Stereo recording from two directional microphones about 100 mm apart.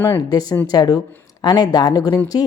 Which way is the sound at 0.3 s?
40° left (ahead or behind).